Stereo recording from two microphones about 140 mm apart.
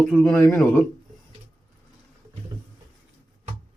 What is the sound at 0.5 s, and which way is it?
Speech, 20° left (ahead or behind).